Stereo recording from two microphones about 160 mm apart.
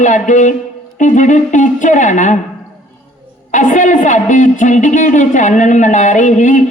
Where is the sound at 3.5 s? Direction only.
50° left (ahead or behind).